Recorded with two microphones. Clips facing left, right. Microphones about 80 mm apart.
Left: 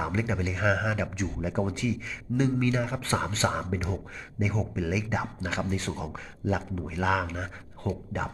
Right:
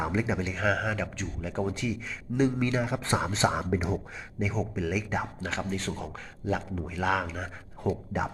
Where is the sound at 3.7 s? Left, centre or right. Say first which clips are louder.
Right 3 dB; centre.